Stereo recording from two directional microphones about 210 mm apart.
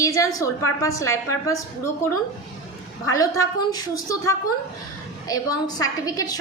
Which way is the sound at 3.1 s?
15° left (ahead or behind).